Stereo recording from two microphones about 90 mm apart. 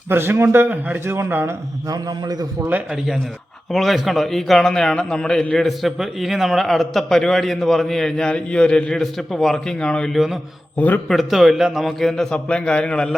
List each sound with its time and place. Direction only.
0.1 s speech: 25° right (ahead or behind)
1.9 s a man's voice: 50° right (ahead or behind)
3.7 s a man's voice: centre (ahead or behind); by 11.0 s 20° left (ahead or behind)
11.1 s a man's voice: centre (ahead or behind)